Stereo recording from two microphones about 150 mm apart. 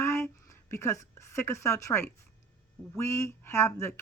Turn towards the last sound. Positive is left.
turn(degrees=20)  # may be behind; listen again after turning